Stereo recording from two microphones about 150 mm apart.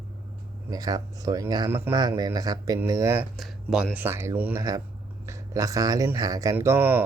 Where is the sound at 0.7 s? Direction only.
25° right (ahead or behind).